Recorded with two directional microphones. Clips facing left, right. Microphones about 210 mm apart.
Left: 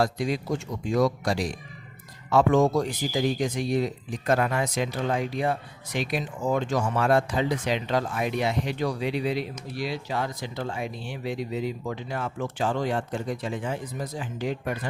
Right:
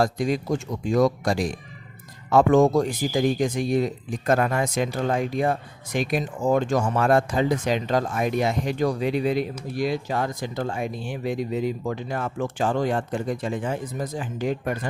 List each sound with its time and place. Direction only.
0.0 s speech: 45° right (ahead or behind)